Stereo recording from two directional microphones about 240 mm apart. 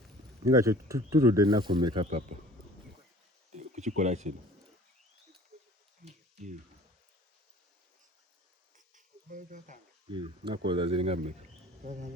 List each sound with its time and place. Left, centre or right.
0.4 s speech: centre
3.5 s speech: right
6.1 s a sound: right
9.0 s insect: right
10.1 s speech: right